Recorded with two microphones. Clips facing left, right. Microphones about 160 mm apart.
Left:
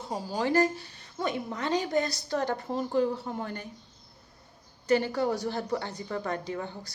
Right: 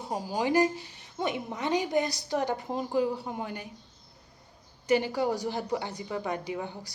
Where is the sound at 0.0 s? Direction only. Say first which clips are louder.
Even; 15° right (ahead or behind).